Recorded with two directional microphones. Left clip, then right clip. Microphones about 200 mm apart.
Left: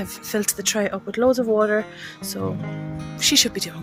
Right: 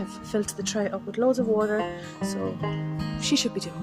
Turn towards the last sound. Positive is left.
turn(degrees=0)  # may be behind; listen again after turning